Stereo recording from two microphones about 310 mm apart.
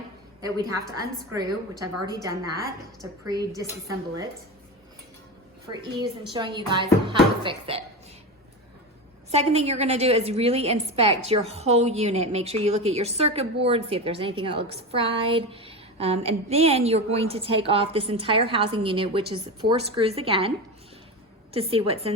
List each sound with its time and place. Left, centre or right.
0.9 s a woman's voice: centre
5.6 s a woman's voice: centre
9.3 s a woman's voice: centre
21.5 s a woman's voice: centre